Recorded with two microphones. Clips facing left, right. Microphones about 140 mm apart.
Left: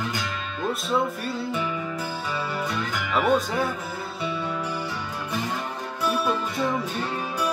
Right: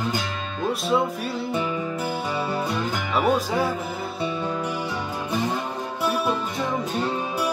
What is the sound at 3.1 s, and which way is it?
Music, 5° right (ahead or behind).